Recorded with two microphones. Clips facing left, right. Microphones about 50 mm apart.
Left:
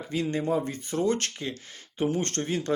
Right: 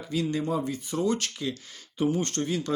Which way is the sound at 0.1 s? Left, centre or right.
Left.